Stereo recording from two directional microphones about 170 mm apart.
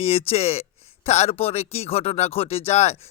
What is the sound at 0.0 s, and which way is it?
Speech, 35° left (ahead or behind).